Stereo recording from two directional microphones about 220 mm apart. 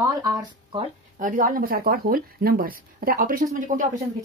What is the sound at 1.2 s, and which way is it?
Speech, 40° right (ahead or behind).